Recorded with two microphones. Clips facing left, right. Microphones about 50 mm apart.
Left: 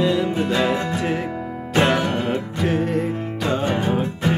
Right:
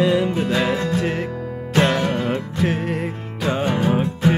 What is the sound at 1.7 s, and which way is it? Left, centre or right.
Music, centre.